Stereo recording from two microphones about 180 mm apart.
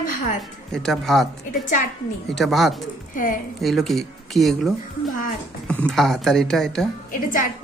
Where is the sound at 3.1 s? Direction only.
45° left (ahead or behind).